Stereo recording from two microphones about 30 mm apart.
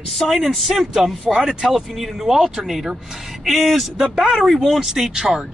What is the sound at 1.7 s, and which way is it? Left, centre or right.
Speech, centre.